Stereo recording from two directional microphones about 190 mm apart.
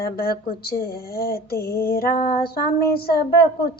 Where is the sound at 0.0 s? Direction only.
50° left (ahead or behind).